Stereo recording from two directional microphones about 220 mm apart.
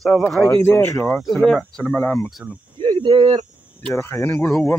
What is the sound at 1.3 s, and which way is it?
Speech, centre (ahead or behind).